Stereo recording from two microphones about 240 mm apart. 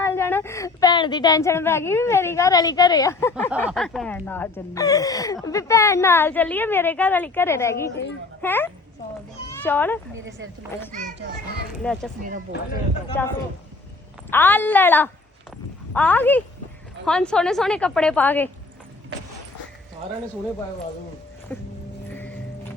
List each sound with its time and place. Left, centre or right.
0.0 s a child's voice: centre
10.2 s speech: right
11.8 s a woman's voice: centre
13.2 s a woman's voice: centre
21.5 s a woman's voice: centre